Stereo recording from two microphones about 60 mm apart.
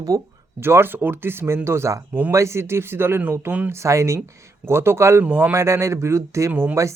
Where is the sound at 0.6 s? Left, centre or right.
Right.